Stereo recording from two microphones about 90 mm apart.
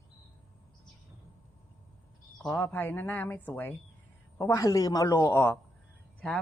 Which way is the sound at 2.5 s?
25° left (ahead or behind).